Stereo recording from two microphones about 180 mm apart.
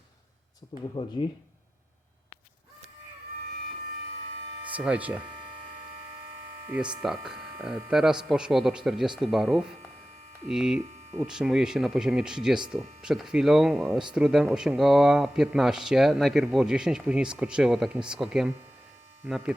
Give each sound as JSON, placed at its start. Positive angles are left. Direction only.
{"t": 0.7, "sound": "speech", "side_deg": 30}
{"t": 4.7, "sound": "speech", "side_deg": -5}
{"t": 7.0, "sound": "speech", "side_deg": -5}